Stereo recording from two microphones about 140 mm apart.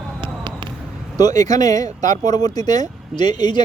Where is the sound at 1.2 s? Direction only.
25° left (ahead or behind).